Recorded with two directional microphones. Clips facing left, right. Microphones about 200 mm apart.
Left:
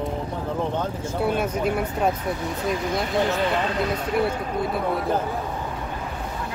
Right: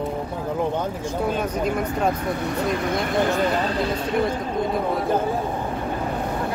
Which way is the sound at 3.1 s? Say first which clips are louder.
Right 2 dB; 45° right (ahead or behind).